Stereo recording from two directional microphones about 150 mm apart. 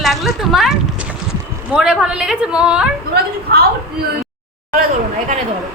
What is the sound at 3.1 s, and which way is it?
Speech, 90° right.